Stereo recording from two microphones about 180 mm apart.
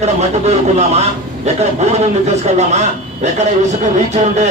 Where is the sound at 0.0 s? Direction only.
40° right (ahead or behind).